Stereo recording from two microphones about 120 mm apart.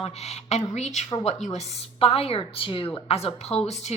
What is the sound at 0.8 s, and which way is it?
Speech, 70° left (ahead or behind).